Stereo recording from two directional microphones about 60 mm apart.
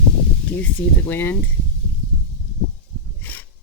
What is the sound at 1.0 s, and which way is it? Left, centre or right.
Speech, left.